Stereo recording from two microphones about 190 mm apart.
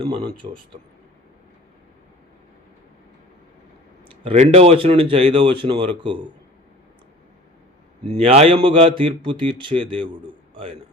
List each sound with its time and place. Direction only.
0.0 s speech: 20° right (ahead or behind)
4.2 s speech: 35° right (ahead or behind)
8.1 s a man's voice: 30° right (ahead or behind)